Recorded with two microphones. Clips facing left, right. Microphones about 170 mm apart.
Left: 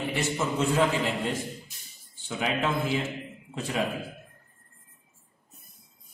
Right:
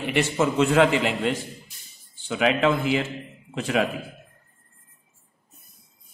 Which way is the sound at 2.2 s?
80° right.